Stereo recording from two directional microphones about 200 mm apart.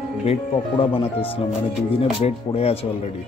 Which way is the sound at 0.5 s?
25° left (ahead or behind).